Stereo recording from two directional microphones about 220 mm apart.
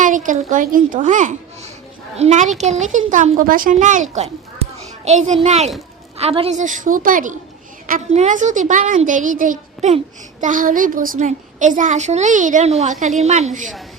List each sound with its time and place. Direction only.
0.0 s a child's voice: 35° right (ahead or behind)